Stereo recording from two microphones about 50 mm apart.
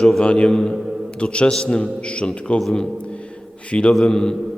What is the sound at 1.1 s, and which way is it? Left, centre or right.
A man's voice, left.